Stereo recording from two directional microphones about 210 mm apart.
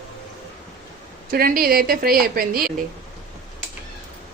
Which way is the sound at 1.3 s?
45° right (ahead or behind).